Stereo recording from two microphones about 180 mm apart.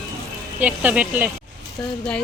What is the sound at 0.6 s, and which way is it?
Speech, 10° right (ahead or behind).